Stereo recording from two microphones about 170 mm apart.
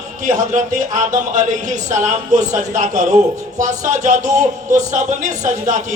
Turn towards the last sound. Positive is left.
turn(degrees=-45)  # may be behind; listen again after turning